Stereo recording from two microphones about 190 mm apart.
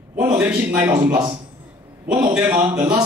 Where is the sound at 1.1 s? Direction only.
25° right (ahead or behind).